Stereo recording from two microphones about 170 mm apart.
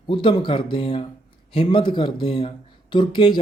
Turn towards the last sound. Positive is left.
turn(degrees=30)  # may be behind; listen again after turning